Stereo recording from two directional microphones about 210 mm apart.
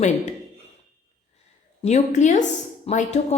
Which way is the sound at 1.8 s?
35° left (ahead or behind).